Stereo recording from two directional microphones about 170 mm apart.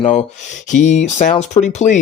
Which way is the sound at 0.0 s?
40° left (ahead or behind).